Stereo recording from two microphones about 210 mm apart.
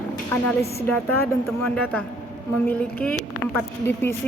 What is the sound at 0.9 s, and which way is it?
A woman's voice, 10° left (ahead or behind).